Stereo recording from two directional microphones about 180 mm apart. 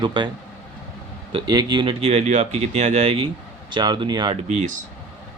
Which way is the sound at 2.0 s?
40° right (ahead or behind).